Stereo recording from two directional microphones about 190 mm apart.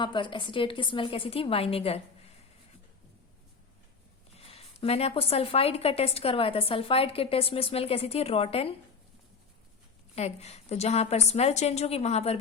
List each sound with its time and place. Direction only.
0.0 s a woman's voice: 25° left (ahead or behind)
4.4 s a woman's voice: 30° left (ahead or behind)
10.2 s a woman's voice: 35° left (ahead or behind)